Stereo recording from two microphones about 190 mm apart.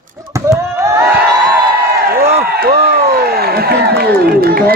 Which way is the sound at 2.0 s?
55° right (ahead or behind).